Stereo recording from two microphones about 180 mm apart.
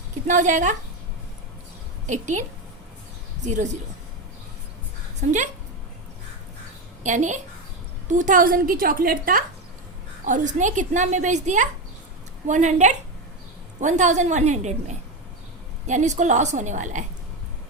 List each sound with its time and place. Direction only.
0.3 s a woman's voice: 45° right (ahead or behind)
2.0 s a woman's voice: 40° right (ahead or behind)
3.4 s a woman's voice: 40° right (ahead or behind)
5.2 s a woman's voice: 40° right (ahead or behind)
7.0 s a woman's voice: 45° right (ahead or behind)